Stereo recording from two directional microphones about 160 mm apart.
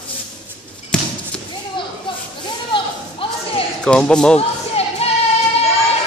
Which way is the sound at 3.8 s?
5° left (ahead or behind).